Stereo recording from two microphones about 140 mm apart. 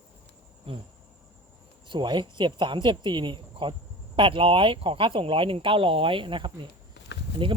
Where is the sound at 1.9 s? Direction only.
35° right (ahead or behind).